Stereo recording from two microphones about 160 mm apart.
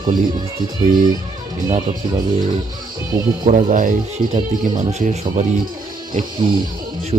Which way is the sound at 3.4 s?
55° right (ahead or behind).